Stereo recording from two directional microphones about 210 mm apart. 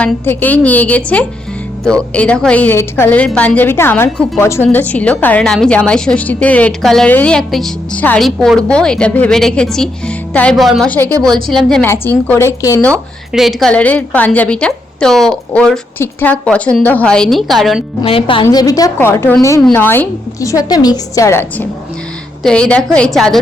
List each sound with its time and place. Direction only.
0.0 s a woman's voice: 10° left (ahead or behind)
18.0 s a woman's voice: 25° left (ahead or behind); by 23.4 s centre (ahead or behind)